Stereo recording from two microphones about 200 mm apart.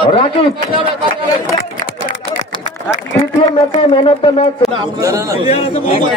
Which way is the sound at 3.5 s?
25° left (ahead or behind).